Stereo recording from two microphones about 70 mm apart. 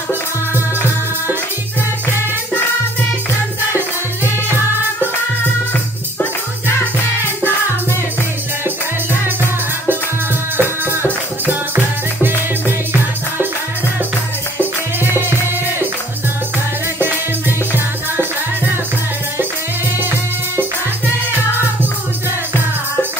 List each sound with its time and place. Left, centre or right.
10.6 s music: right
17.0 s music: right
20.0 s music: right